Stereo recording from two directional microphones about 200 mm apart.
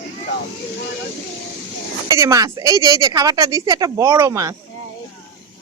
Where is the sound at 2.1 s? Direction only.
15° right (ahead or behind).